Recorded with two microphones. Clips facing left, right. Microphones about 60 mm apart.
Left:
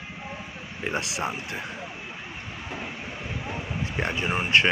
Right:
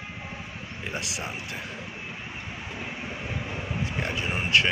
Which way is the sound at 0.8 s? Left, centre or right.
Left.